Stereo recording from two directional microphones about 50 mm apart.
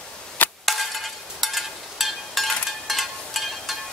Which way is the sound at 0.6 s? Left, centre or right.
Centre.